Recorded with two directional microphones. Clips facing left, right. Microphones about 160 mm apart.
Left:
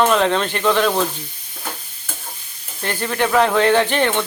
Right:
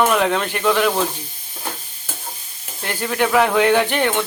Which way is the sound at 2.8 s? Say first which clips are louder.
Even; 10° right (ahead or behind).